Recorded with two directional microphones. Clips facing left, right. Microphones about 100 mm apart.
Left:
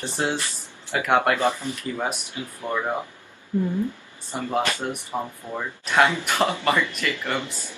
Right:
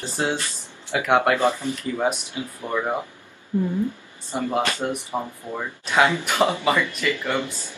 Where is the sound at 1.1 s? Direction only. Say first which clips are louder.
Right 2 dB; 15° right (ahead or behind).